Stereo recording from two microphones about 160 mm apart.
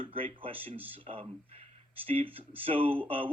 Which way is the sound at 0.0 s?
35° right (ahead or behind).